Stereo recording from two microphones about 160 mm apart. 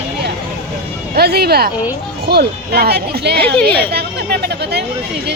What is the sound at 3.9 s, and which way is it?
Chatter, 90° right.